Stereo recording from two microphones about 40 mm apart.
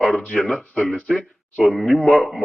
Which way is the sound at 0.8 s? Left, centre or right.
Centre.